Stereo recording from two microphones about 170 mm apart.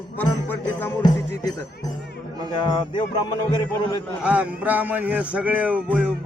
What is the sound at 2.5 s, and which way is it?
Speech, 30° left (ahead or behind).